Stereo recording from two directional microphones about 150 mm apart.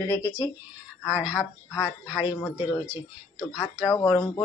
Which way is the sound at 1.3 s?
20° left (ahead or behind).